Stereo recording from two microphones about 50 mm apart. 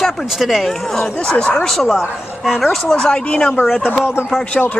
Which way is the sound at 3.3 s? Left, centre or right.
Left.